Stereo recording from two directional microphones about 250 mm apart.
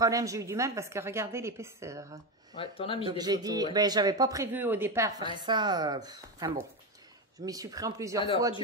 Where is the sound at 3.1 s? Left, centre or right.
Centre.